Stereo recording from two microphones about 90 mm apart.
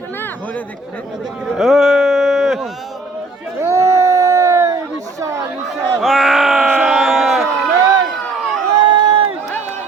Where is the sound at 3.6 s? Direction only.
30° right (ahead or behind).